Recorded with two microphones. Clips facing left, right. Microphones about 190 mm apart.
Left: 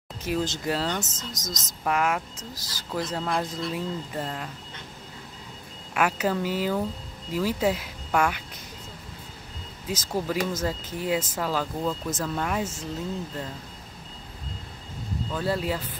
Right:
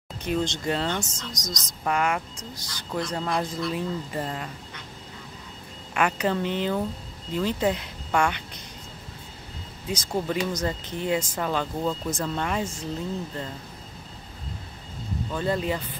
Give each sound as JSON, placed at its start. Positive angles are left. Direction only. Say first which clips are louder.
{"t": 0.2, "sound": "speech", "louder": "right 1 dB", "side_deg": 5}
{"t": 1.1, "sound": "speech", "louder": "right 1 dB", "side_deg": 25}
{"t": 1.9, "sound": "speech", "louder": "even", "side_deg": 0}
{"t": 5.9, "sound": "speech", "louder": "even", "side_deg": 5}
{"t": 9.8, "sound": "speech", "louder": "right 1 dB", "side_deg": 5}
{"t": 15.3, "sound": "speech", "louder": "right 1 dB", "side_deg": 5}